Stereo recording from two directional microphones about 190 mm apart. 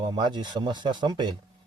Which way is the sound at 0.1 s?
25° right (ahead or behind).